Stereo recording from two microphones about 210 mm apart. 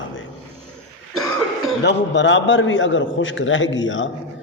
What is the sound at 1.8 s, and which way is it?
A man's voice, 60° left (ahead or behind).